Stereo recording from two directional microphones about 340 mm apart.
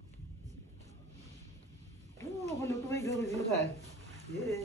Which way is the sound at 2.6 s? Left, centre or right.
Centre.